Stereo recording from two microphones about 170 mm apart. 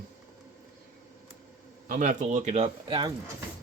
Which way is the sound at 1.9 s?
50° right (ahead or behind).